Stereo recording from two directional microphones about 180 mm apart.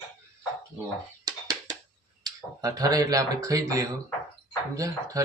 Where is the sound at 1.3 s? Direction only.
20° right (ahead or behind).